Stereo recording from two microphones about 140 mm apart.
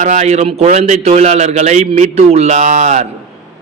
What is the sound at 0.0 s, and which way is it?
A man's voice, 60° right (ahead or behind).